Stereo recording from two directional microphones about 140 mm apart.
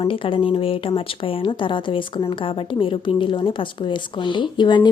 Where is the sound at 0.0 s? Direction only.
40° left (ahead or behind).